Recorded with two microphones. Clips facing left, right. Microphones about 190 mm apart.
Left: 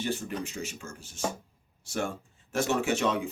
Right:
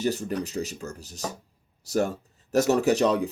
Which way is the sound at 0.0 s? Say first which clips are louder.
Right 5 dB; 40° right (ahead or behind).